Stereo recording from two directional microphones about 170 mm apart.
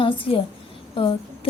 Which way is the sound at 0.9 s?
30° left (ahead or behind).